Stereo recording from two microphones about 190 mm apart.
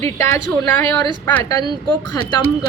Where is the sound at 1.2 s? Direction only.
10° left (ahead or behind).